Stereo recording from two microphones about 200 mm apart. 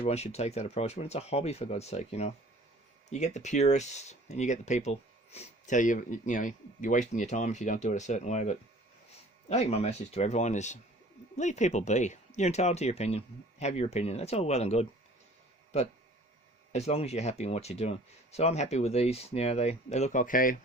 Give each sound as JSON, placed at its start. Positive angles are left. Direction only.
{"t": 0.0, "sound": "speech", "side_deg": 30}
{"t": 16.7, "sound": "speech", "side_deg": 30}